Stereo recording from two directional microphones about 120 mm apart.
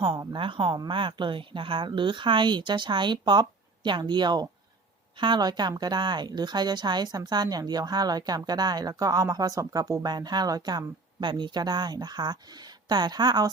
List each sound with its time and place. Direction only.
0.0 s a woman's voice: 40° right (ahead or behind)